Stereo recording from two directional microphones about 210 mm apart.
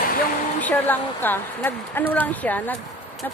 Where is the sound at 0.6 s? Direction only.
10° left (ahead or behind).